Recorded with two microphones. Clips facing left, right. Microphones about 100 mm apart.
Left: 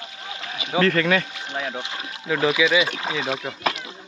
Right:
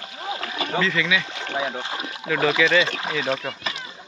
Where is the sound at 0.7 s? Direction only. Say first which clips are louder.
Left 5 dB; 55° left (ahead or behind).